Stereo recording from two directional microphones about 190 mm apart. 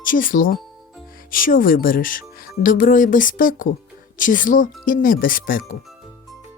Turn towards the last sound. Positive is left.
turn(degrees=50)  # may be behind; listen again after turning